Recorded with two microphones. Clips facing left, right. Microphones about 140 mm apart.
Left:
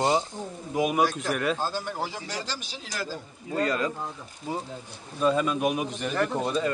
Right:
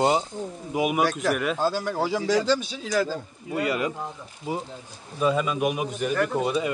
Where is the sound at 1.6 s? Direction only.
90° right.